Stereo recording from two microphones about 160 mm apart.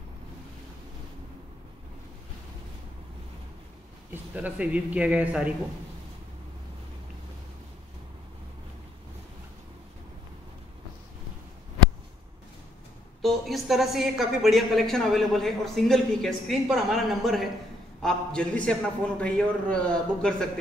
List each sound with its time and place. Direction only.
4.1 s a man's voice: 10° right (ahead or behind)
13.2 s a woman's voice: centre (ahead or behind)